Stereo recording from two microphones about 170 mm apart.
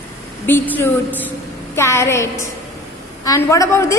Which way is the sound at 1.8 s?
15° left (ahead or behind).